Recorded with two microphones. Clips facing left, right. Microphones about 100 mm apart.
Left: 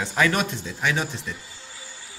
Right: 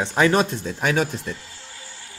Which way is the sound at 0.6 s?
50° right (ahead or behind).